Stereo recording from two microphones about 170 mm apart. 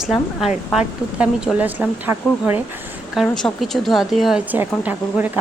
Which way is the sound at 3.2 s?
Centre (ahead or behind).